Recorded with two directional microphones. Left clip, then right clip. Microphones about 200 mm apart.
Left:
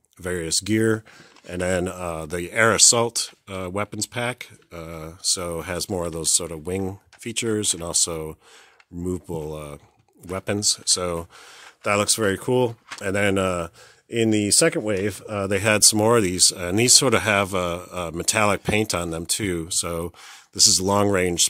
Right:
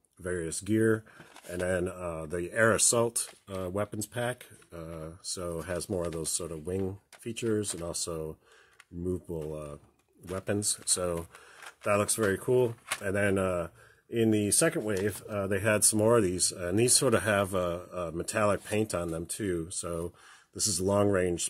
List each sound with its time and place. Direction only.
0.2 s speech: 40° left (ahead or behind)
11.8 s speech: 40° left (ahead or behind)